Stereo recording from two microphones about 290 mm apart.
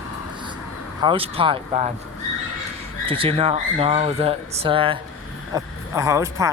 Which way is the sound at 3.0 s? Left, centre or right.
Centre.